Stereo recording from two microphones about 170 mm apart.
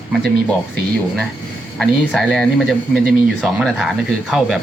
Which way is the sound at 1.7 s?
Centre (ahead or behind).